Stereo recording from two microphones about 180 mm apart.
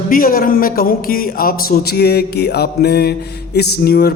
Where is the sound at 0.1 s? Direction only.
50° left (ahead or behind).